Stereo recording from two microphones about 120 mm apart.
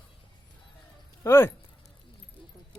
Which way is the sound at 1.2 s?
20° left (ahead or behind).